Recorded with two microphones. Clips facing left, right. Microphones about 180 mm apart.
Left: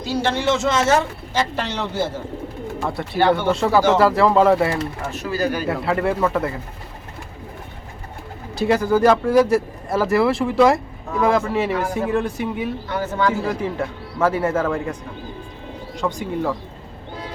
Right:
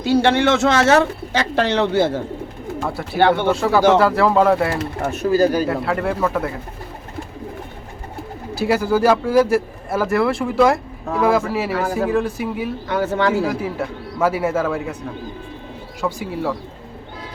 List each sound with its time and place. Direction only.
0.0 s speech: 60° right (ahead or behind)
2.8 s speech: 5° right (ahead or behind)
5.2 s speech: 40° right (ahead or behind)
5.6 s speech: centre (ahead or behind)
8.5 s speech: 5° right (ahead or behind)
12.9 s speech: 75° right (ahead or behind)
13.4 s speech: 5° right (ahead or behind)
16.0 s speech: 5° right (ahead or behind)